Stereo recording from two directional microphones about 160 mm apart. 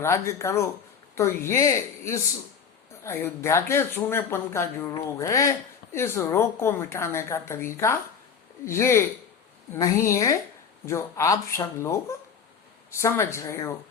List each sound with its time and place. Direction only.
0.0 s a woman's voice: 15° left (ahead or behind)